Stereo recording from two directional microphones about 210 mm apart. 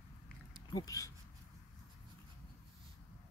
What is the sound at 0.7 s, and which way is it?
Speech, 15° left (ahead or behind).